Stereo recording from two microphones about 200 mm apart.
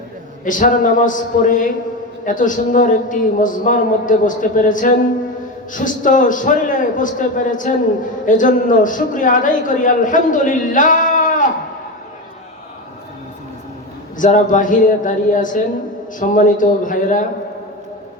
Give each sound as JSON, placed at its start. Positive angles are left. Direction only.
{"t": 0.4, "sound": "a man's voice", "side_deg": 40}
{"t": 14.2, "sound": "a man's voice", "side_deg": 40}